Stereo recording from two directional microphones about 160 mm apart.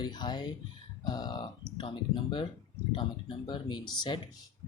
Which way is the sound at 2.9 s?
30° left (ahead or behind).